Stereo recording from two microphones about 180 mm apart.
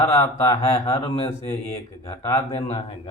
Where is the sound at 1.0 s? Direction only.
30° left (ahead or behind).